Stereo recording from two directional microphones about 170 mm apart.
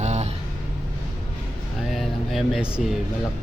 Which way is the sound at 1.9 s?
Centre (ahead or behind).